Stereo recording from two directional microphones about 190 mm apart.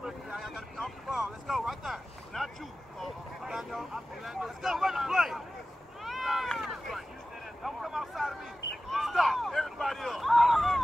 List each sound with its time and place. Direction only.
0.0 s vehicle: centre (ahead or behind)
6.0 s run: centre (ahead or behind)
7.6 s vehicle: centre (ahead or behind)
8.9 s a sound: centre (ahead or behind)